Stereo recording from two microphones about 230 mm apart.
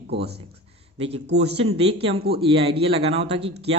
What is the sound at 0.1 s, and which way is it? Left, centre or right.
Speech, right.